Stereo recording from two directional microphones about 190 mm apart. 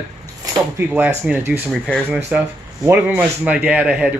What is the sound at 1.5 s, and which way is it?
Speech, centre (ahead or behind).